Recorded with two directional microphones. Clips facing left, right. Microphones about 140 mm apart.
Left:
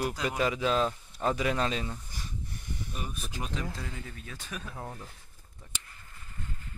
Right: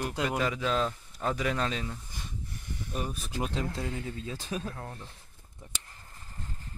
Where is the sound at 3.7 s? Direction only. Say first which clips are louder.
Right 6 dB; 20° right (ahead or behind).